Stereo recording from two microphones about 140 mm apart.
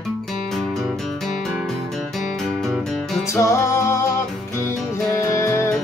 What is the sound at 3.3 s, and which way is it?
Music, 20° left (ahead or behind).